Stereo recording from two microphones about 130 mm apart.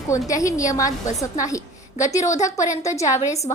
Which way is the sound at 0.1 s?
25° left (ahead or behind).